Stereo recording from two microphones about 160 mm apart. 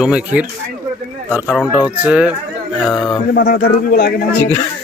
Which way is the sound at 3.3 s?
70° left (ahead or behind).